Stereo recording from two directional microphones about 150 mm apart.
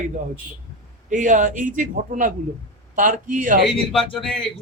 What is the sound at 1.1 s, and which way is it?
A man's voice, 60° right (ahead or behind).